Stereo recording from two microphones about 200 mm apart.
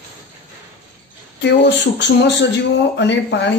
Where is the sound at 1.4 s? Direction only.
60° left (ahead or behind).